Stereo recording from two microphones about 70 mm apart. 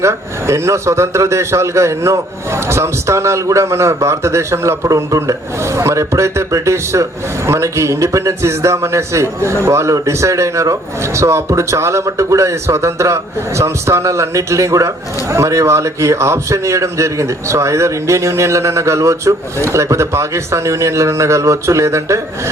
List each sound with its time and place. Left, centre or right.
0.0 s a man's voice: right